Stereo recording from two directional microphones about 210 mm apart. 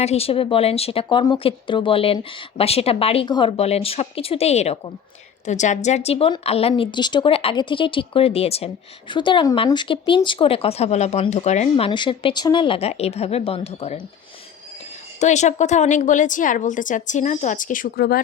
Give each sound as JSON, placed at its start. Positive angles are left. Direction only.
{"t": 0.0, "sound": "a woman's voice", "side_deg": 30}
{"t": 11.9, "sound": "a woman's voice", "side_deg": 20}
{"t": 15.2, "sound": "a woman's voice", "side_deg": 35}